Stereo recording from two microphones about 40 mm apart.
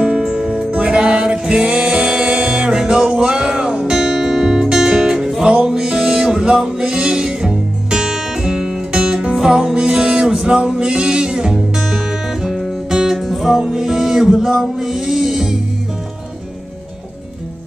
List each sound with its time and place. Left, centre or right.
0.0 s music: right